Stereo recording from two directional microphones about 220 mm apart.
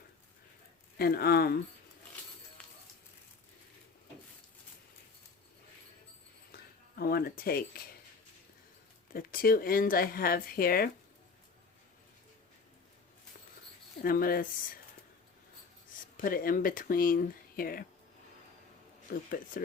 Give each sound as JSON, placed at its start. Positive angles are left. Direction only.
{"t": 0.9, "sound": "speech", "side_deg": 45}
{"t": 6.9, "sound": "speech", "side_deg": 45}
{"t": 9.1, "sound": "speech", "side_deg": 40}
{"t": 14.0, "sound": "speech", "side_deg": 40}
{"t": 16.1, "sound": "speech", "side_deg": 40}
{"t": 19.3, "sound": "speech", "side_deg": 40}